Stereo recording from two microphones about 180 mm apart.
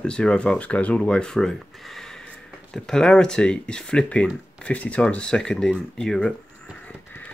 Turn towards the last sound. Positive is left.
turn(degrees=5)  # may be behind; listen again after turning